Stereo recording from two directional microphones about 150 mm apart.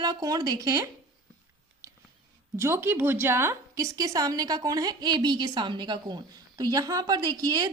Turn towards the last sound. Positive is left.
turn(degrees=-25)  # may be behind; listen again after turning